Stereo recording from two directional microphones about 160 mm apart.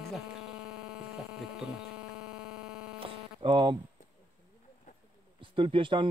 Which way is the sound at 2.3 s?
5° right (ahead or behind).